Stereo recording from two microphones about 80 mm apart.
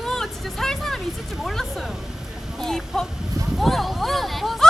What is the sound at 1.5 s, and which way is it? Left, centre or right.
Speech, centre.